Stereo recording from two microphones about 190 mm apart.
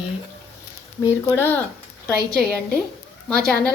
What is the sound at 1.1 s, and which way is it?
Speech, 15° left (ahead or behind).